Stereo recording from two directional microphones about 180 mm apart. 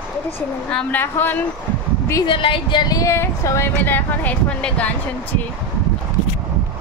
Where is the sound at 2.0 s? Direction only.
20° left (ahead or behind); by 4.8 s 5° left (ahead or behind).